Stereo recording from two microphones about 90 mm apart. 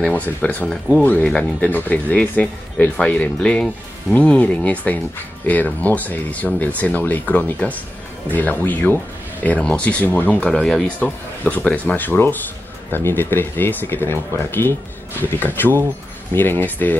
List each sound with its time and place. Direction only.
0.4 s speech: 15° left (ahead or behind)